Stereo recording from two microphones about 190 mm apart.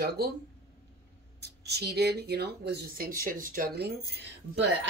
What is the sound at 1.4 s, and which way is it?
Speech, 60° right (ahead or behind).